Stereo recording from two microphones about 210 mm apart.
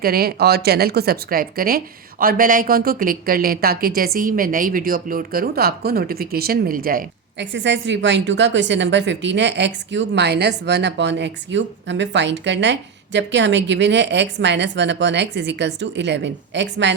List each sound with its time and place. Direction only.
0.0 s a woman's voice: 45° right (ahead or behind)